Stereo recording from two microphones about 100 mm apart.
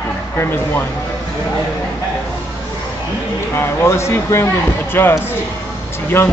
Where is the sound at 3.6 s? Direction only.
25° left (ahead or behind).